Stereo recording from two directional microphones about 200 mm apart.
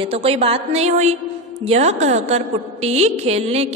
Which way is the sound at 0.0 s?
30° right (ahead or behind).